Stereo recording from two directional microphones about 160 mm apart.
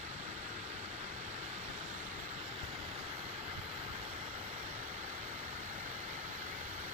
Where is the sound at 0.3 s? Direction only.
45° right (ahead or behind).